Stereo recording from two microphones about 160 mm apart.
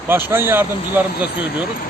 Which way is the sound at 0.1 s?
15° right (ahead or behind).